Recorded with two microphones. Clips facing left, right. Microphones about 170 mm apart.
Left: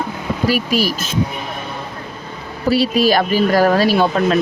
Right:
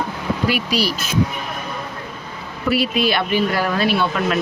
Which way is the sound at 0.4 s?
45° left (ahead or behind).